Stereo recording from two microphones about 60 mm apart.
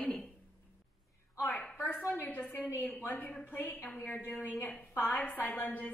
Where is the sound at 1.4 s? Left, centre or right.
Left.